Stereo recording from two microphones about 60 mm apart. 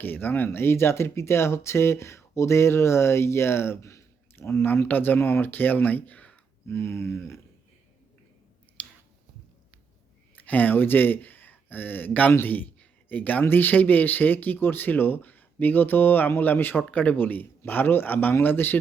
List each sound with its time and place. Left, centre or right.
0.0 s speech: left
6.7 s speech: left
8.8 s chewing: left
10.3 s a man's voice: left